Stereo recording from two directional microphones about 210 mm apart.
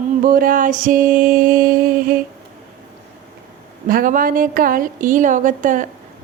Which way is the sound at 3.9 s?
40° right (ahead or behind).